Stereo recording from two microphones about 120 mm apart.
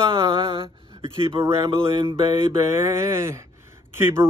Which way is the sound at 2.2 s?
35° right (ahead or behind).